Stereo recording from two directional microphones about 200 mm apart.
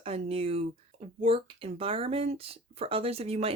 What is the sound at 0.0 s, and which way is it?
Speech, 30° right (ahead or behind).